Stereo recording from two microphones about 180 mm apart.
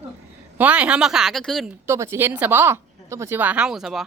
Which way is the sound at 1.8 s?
15° right (ahead or behind).